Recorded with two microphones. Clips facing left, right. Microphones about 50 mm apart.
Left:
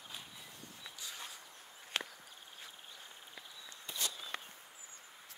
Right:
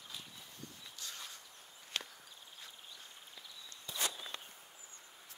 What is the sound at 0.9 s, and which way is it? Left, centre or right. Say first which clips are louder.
Walk: left 1 dB; centre.